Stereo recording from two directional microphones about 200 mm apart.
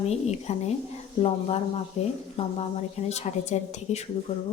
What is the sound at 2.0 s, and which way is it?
A woman's voice, 35° left (ahead or behind).